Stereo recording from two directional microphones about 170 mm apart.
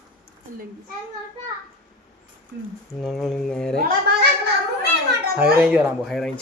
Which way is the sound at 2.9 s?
Centre (ahead or behind).